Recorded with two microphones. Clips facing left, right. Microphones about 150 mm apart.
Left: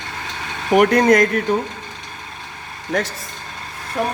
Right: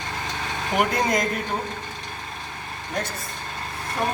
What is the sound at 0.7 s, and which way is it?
Speech, 70° left (ahead or behind).